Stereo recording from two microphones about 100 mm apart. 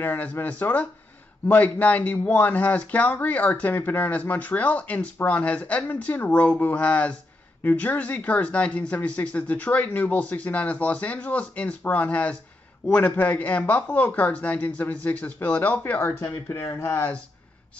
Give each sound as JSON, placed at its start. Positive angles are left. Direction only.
{"t": 0.0, "sound": "a man's voice", "side_deg": 15}